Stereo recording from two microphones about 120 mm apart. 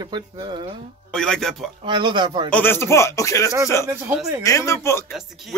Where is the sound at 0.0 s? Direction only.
35° right (ahead or behind).